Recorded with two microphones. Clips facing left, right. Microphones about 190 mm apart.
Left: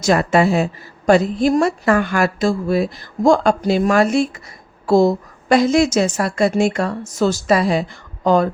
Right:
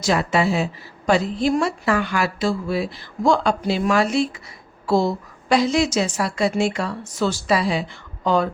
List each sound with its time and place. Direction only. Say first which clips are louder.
0.0 s a woman's voice: left 5 dB; 50° left (ahead or behind)